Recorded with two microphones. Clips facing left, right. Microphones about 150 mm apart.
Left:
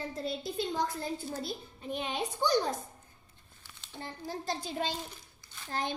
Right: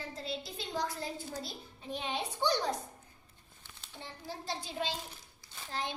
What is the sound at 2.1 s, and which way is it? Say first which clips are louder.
Speech: left 2 dB; 45° left (ahead or behind).